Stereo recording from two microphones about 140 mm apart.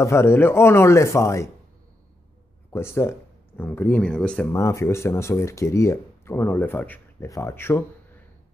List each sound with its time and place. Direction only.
0.0 s speech: 20° left (ahead or behind)
2.7 s speech: 20° left (ahead or behind)
4.5 s speech: 20° left (ahead or behind)